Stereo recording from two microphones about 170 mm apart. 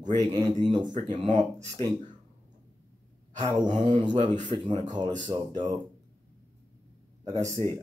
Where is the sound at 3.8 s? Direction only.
30° right (ahead or behind).